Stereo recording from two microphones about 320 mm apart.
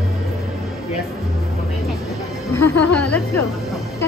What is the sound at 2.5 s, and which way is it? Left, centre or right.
Speech, left.